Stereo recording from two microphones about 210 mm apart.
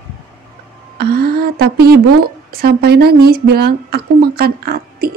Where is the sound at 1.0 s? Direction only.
50° right (ahead or behind).